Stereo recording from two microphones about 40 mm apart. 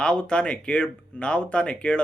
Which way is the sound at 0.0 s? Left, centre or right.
Left.